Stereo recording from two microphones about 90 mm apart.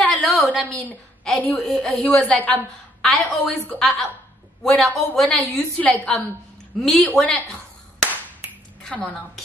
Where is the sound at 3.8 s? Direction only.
Centre (ahead or behind).